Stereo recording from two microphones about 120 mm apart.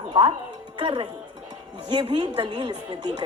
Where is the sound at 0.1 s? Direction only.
45° right (ahead or behind).